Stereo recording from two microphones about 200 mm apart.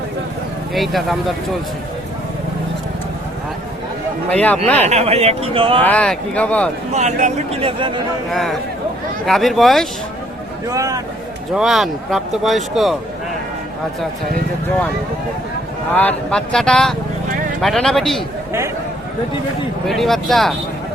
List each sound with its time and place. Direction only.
0.7 s speech: centre (ahead or behind)
4.3 s speech: 5° left (ahead or behind)
4.9 s speech: 30° right (ahead or behind)
5.8 s speech: 5° left (ahead or behind)
6.9 s speech: 35° right (ahead or behind)
8.3 s speech: centre (ahead or behind)
10.7 s a man's voice: 15° right (ahead or behind)
11.5 s speech: centre (ahead or behind)
16.0 s speech: 5° left (ahead or behind)
19.9 s speech: centre (ahead or behind)